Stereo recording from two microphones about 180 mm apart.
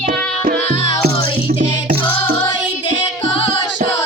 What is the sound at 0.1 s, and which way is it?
Music, 65° right (ahead or behind).